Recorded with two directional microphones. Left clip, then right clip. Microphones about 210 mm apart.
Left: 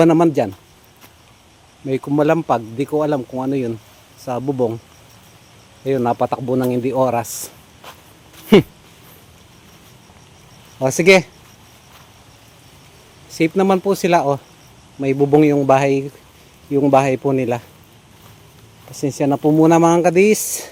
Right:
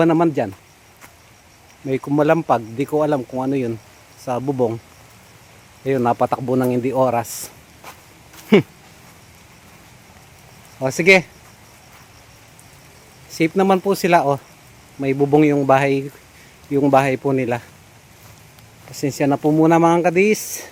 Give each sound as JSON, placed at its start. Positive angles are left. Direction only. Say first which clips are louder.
{"t": 0.0, "sound": "speech", "louder": "left 3 dB", "side_deg": 10}
{"t": 1.9, "sound": "speech", "louder": "even", "side_deg": 0}
{"t": 5.8, "sound": "speech", "louder": "even", "side_deg": 0}
{"t": 10.8, "sound": "speech", "louder": "left 2 dB", "side_deg": 15}
{"t": 13.3, "sound": "speech", "louder": "left 1 dB", "side_deg": 0}
{"t": 18.9, "sound": "speech", "louder": "left 1 dB", "side_deg": 5}